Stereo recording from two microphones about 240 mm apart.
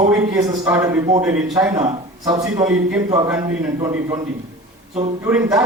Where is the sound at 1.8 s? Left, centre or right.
Right.